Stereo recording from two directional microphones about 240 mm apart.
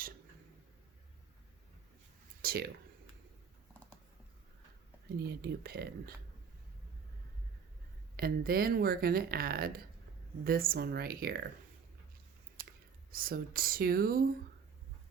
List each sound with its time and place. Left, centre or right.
2.4 s a sound: right
5.4 s speech: right
8.1 s speech: right
13.1 s speech: right